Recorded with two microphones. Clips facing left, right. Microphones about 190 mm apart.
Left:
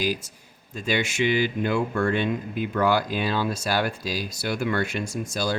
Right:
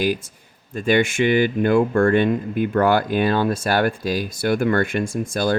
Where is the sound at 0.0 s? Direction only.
55° right (ahead or behind).